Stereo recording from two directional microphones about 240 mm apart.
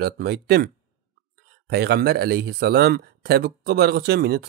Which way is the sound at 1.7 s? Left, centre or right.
Right.